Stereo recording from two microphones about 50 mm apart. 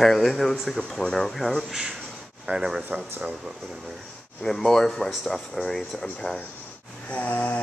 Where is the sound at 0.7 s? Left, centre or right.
Centre.